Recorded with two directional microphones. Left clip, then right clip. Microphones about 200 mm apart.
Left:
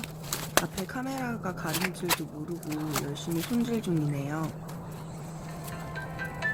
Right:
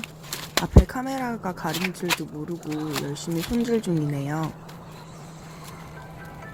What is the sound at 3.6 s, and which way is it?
Speech, 20° right (ahead or behind).